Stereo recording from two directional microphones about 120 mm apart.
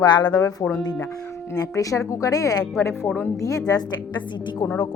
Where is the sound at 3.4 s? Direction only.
30° left (ahead or behind).